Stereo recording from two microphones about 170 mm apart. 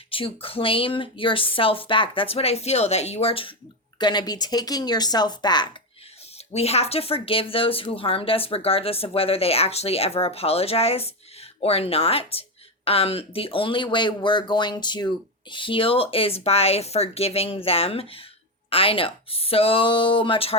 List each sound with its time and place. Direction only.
0.1 s speech: 30° left (ahead or behind)
6.5 s speech: 35° left (ahead or behind)